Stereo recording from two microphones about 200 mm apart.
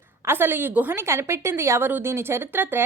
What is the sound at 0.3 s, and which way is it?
A woman's voice, 10° right (ahead or behind).